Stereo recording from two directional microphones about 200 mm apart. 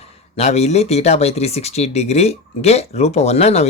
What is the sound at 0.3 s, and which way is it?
Speech, 35° left (ahead or behind).